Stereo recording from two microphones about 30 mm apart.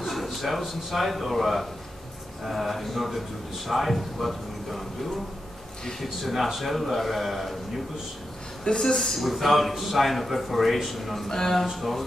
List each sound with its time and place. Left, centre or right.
0.0 s a man's voice: centre
6.2 s a man's voice: centre
8.8 s a man's voice: centre
9.1 s a man's voice: centre
11.2 s speech: centre
11.6 s a man's voice: centre